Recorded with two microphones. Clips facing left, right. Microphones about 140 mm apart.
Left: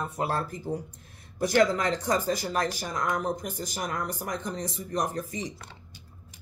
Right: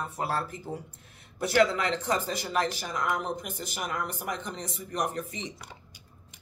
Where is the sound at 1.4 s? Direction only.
40° left (ahead or behind).